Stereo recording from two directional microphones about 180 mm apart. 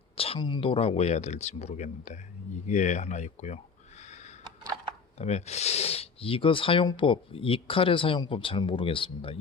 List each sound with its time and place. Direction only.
0.2 s speech: 30° left (ahead or behind)
5.1 s speech: 40° left (ahead or behind)